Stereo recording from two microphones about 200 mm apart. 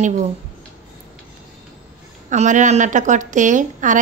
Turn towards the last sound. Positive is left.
turn(degrees=-40)  # may be behind; listen again after turning